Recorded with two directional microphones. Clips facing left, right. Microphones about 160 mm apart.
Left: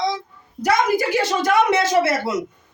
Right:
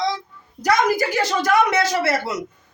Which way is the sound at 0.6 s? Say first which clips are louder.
Even; 25° left (ahead or behind).